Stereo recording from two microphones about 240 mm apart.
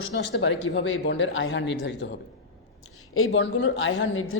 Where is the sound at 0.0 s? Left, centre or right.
Left.